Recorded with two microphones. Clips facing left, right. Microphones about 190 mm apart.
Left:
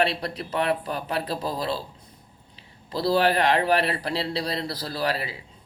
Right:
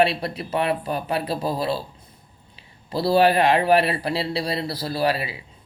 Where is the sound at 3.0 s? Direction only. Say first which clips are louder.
Right 4 dB; 10° right (ahead or behind).